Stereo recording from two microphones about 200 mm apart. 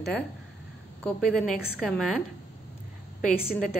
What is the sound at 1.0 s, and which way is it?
A woman's voice, centre (ahead or behind).